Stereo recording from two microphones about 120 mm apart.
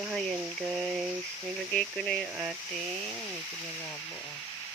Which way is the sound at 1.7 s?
5° left (ahead or behind).